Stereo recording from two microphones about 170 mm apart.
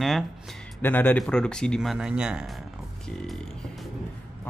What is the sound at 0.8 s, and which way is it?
Speech, 10° left (ahead or behind).